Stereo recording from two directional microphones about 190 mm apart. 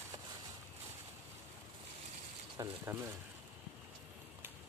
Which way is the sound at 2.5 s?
15° right (ahead or behind).